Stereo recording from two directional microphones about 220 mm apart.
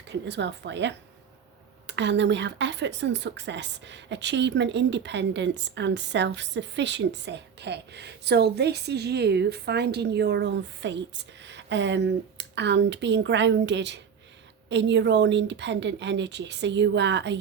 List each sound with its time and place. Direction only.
0.1 s speech: 50° right (ahead or behind)